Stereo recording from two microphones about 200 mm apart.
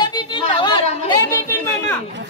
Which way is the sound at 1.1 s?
15° left (ahead or behind).